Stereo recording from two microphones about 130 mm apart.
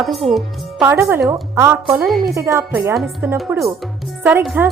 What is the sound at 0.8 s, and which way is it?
A woman's voice, 20° right (ahead or behind).